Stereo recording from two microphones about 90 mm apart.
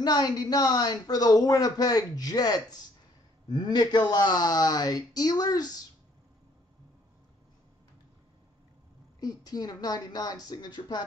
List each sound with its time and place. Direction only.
0.0 s speech: 50° left (ahead or behind)
9.2 s speech: 45° left (ahead or behind)